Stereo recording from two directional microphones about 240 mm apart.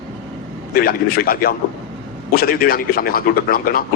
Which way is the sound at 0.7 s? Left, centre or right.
Left.